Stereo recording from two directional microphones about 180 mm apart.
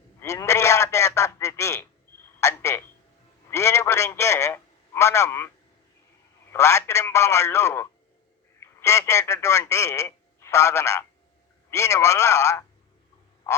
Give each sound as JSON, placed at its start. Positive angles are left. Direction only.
{"t": 0.2, "sound": "a sound", "side_deg": 15}
{"t": 2.4, "sound": "a woman's voice", "side_deg": 15}
{"t": 3.5, "sound": "telephone", "side_deg": 15}
{"t": 6.5, "sound": "speech", "side_deg": 15}